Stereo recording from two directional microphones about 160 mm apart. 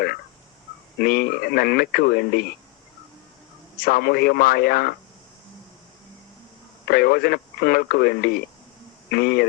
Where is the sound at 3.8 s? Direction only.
70° left (ahead or behind).